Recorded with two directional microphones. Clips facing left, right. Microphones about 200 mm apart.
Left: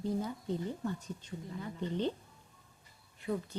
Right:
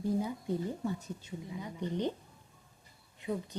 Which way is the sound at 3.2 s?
20° right (ahead or behind).